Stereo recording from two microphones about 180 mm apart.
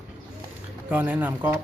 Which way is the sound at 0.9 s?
10° right (ahead or behind).